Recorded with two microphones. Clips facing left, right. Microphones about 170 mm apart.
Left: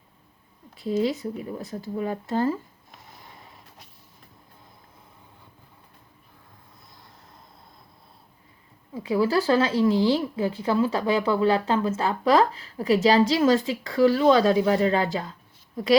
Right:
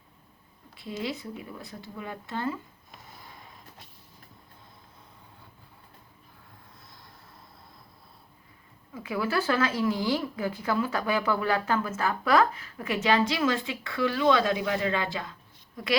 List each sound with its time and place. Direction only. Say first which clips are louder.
0.8 s speech: left 9 dB; 40° left (ahead or behind)
8.9 s speech: left 7 dB; 30° left (ahead or behind)